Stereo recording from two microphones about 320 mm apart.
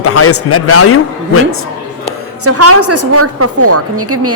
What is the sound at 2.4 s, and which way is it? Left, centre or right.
A woman's voice, right.